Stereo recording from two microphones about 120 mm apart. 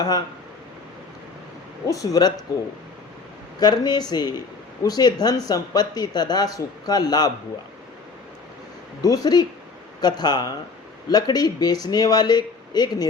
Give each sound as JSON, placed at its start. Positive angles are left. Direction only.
{"t": 1.9, "sound": "speech", "side_deg": 30}
{"t": 3.6, "sound": "speech", "side_deg": 35}
{"t": 9.0, "sound": "speech", "side_deg": 30}